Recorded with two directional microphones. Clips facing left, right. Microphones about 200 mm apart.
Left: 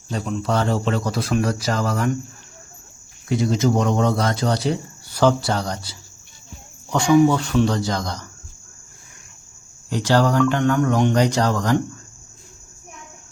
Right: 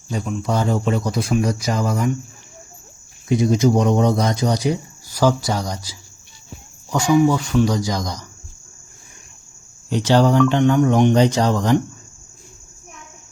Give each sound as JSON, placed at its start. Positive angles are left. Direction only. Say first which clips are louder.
{"t": 0.1, "sound": "speech", "louder": "even", "side_deg": -10}
{"t": 3.2, "sound": "speech", "louder": "right 3 dB", "side_deg": -20}
{"t": 7.1, "sound": "speech", "louder": "left 1 dB", "side_deg": 0}
{"t": 7.9, "sound": "speech", "louder": "right 1 dB", "side_deg": -15}
{"t": 9.9, "sound": "speech", "louder": "right 3 dB", "side_deg": -20}